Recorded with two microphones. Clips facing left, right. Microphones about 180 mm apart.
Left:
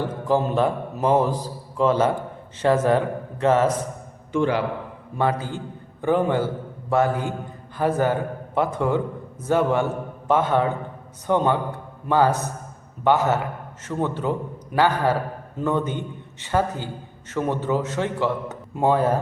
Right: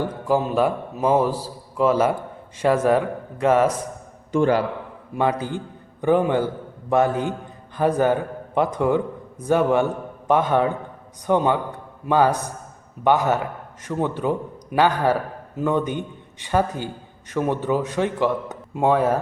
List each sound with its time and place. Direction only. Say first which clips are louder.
0.0 s a man's voice: even; 10° right (ahead or behind)
4.3 s a man's voice: right 3 dB; 45° right (ahead or behind)
5.1 s a man's voice: right 1 dB; 15° right (ahead or behind)
18.7 s speech: right 1 dB; centre (ahead or behind)